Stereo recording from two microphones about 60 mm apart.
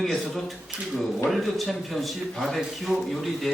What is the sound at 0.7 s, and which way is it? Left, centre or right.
Speech, right.